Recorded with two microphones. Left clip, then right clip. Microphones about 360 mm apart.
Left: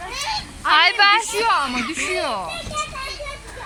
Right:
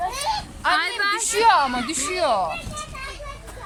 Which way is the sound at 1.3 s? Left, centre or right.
Right.